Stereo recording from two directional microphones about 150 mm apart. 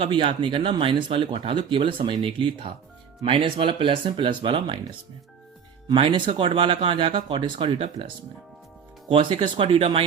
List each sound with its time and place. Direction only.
0.0 s speech: 35° right (ahead or behind)
5.9 s speech: 30° right (ahead or behind)
9.0 s speech: 35° right (ahead or behind)